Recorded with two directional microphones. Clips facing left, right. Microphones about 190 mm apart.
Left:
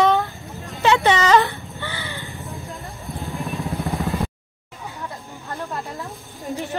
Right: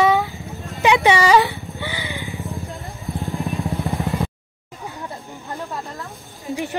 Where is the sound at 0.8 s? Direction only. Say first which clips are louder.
Right 2 dB; 15° right (ahead or behind).